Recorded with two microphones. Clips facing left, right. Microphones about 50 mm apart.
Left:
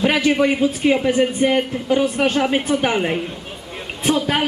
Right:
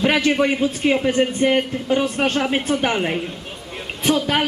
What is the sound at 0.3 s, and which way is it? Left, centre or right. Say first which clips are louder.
Speech: left 2 dB; centre.